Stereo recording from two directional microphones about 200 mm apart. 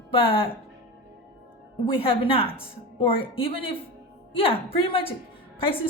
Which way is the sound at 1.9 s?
25° left (ahead or behind).